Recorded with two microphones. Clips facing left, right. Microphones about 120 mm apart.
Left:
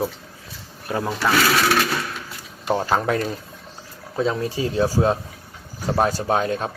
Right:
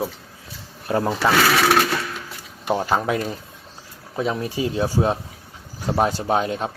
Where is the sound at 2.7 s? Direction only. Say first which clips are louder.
Even; 10° right (ahead or behind).